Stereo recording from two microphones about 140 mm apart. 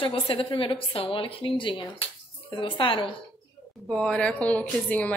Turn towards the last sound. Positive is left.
turn(degrees=10)  # may be behind; listen again after turning